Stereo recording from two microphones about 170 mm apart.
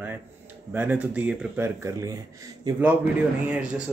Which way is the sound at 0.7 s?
10° right (ahead or behind).